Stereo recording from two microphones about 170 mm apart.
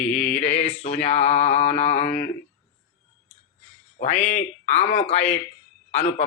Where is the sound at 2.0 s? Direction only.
55° left (ahead or behind).